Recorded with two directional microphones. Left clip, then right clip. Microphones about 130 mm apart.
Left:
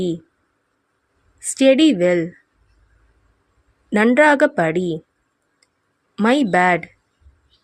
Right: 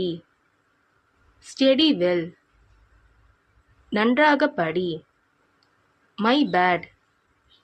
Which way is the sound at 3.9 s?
60° left (ahead or behind).